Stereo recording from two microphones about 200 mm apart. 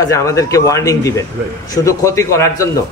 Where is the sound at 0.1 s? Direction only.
15° left (ahead or behind).